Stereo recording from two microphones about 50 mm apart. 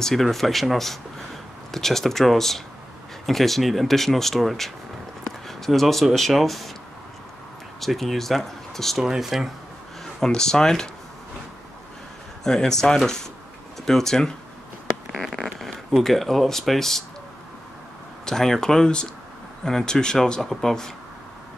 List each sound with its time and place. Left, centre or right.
0.0 s speech: centre
7.8 s speech: centre
8.9 s speech: centre
10.2 s speech: centre
12.4 s speech: centre
15.3 s a sound: centre
16.0 s speech: centre
18.2 s speech: centre